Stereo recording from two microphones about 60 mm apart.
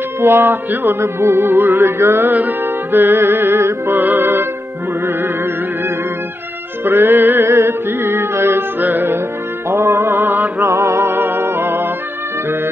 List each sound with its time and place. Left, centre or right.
0.2 s music: right
6.8 s music: right
9.7 s mantra: right
10.6 s music: right